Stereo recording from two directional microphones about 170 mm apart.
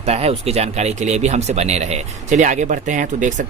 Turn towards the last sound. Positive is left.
turn(degrees=-50)  # may be behind; listen again after turning